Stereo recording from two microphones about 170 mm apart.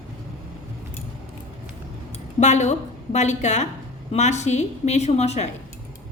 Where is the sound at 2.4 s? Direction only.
45° left (ahead or behind).